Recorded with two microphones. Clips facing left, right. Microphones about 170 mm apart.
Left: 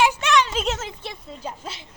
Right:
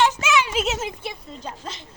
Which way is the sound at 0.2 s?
5° right (ahead or behind).